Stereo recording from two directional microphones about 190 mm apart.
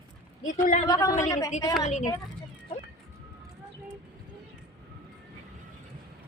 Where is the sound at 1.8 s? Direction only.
40° left (ahead or behind).